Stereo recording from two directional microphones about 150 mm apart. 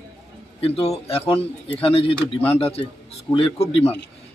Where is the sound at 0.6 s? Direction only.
40° left (ahead or behind).